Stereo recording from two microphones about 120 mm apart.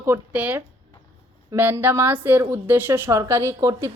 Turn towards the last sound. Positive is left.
turn(degrees=-25)  # may be behind; listen again after turning